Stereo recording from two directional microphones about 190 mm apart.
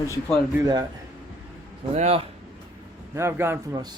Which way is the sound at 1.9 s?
35° right (ahead or behind).